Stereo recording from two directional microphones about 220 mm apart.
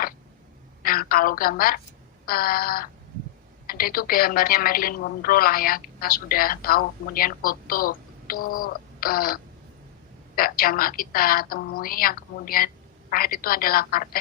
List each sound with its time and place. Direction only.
0.8 s a woman's voice: 40° left (ahead or behind)
2.2 s a sound: 40° left (ahead or behind)
3.7 s a woman's voice: 40° left (ahead or behind)